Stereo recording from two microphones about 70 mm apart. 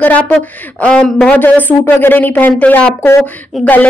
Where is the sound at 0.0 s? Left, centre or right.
Left.